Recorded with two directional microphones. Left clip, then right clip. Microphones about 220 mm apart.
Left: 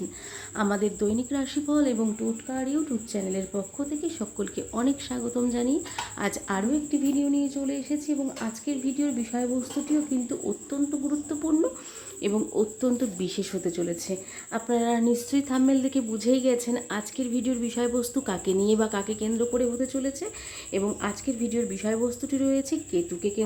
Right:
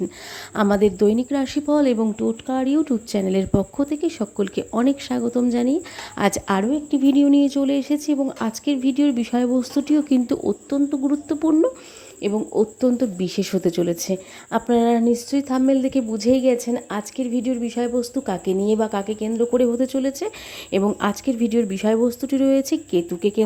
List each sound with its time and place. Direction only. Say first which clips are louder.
0.5 s speech: right 9 dB; 35° right (ahead or behind)